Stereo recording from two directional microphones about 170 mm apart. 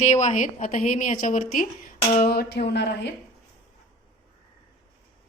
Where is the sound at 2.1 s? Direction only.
65° left (ahead or behind).